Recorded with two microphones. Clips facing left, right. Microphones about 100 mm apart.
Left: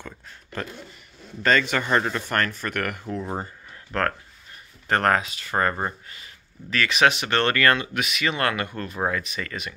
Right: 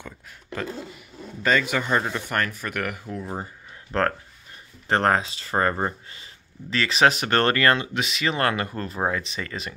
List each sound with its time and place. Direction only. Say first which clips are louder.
1.4 s speech: left 1 dB; 10° right (ahead or behind)
3.9 s speech: right 2 dB; 30° right (ahead or behind)
7.5 s speech: even; 25° right (ahead or behind)